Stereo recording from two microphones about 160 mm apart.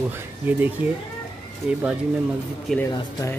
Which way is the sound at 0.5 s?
10° right (ahead or behind).